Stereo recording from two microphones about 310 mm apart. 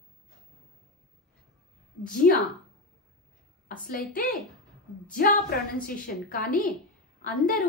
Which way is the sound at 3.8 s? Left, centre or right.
Left.